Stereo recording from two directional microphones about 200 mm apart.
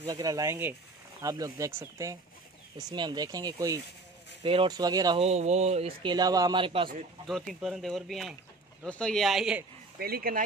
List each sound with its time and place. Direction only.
0.0 s speech: 15° right (ahead or behind)
4.4 s speech: 25° right (ahead or behind)
5.2 s speech: 35° right (ahead or behind)
7.2 s speech: centre (ahead or behind)
9.9 s speech: 50° right (ahead or behind)